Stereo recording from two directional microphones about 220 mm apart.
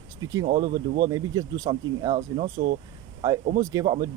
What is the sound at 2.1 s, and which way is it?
Speech, 30° right (ahead or behind).